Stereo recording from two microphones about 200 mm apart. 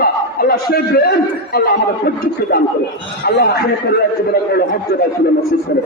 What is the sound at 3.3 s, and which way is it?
A man's voice, 55° left (ahead or behind).